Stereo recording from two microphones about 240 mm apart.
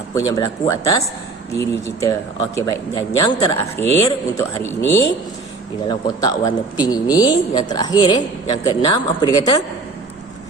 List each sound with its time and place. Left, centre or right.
0.1 s speech: centre